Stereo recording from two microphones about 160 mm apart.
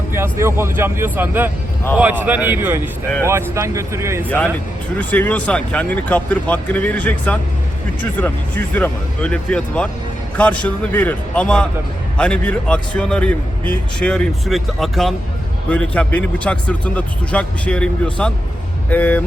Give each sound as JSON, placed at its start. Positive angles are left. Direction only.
{"t": 0.1, "sound": "speech", "side_deg": -15}
{"t": 4.9, "sound": "a man's voice", "side_deg": 10}